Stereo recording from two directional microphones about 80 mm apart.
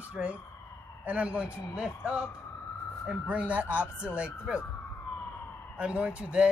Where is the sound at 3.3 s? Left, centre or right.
Centre.